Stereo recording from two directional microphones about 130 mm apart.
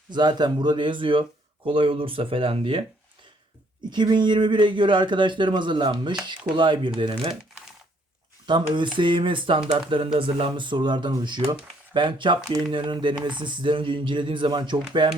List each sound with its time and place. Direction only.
0.1 s speech: 35° right (ahead or behind)
3.8 s speech: 35° right (ahead or behind)
8.4 s speech: 35° right (ahead or behind)